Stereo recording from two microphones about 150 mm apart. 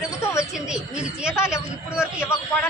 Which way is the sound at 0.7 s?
5° right (ahead or behind).